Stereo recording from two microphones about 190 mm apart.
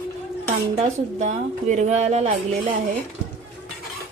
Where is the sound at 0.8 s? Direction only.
35° right (ahead or behind).